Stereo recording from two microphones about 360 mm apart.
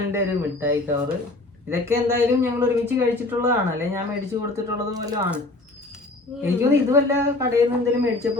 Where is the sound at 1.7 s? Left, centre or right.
Centre.